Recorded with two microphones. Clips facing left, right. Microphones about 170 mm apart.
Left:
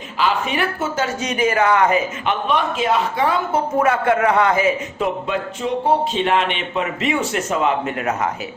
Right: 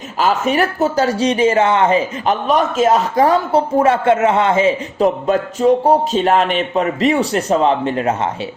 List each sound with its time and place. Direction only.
0.2 s speech: 45° right (ahead or behind)